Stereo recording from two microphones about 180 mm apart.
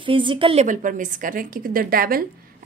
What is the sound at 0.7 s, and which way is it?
A woman's voice, 45° right (ahead or behind).